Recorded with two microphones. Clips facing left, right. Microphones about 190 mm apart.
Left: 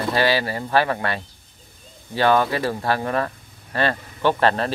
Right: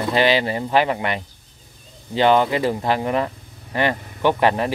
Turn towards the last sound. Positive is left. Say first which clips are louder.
# right 1 dB
turn(degrees=-15)  # may be behind; listen again after turning